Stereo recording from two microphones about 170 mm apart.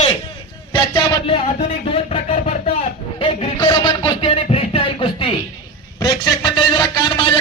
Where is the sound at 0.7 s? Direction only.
30° left (ahead or behind).